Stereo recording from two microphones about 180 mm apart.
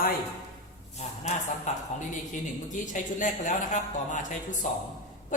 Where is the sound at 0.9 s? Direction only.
40° left (ahead or behind).